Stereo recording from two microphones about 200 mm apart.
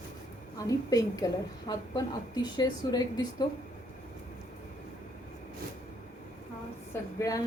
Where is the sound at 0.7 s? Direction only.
15° left (ahead or behind).